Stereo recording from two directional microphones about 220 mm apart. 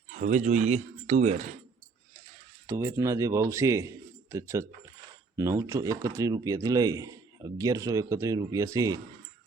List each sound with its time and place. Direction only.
0.1 s speech: 35° right (ahead or behind)
2.6 s speech: 15° right (ahead or behind)